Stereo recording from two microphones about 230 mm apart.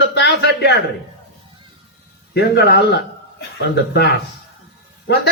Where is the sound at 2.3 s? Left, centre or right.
Left.